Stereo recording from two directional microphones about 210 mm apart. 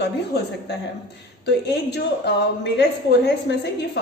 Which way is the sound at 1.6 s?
50° left (ahead or behind).